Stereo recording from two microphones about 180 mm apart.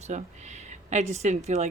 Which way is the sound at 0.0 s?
40° right (ahead or behind).